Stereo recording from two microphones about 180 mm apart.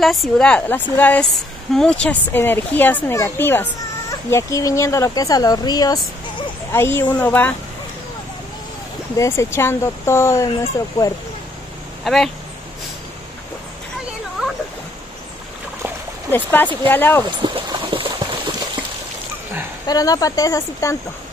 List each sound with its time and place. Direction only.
0.0 s speech: centre (ahead or behind)
9.1 s speech: 15° left (ahead or behind)
12.0 s speech: centre (ahead or behind)
14.4 s a sound: 5° right (ahead or behind)
16.3 s speech: 10° left (ahead or behind)
17.4 s a sound: 25° right (ahead or behind)
19.9 s speech: 20° left (ahead or behind)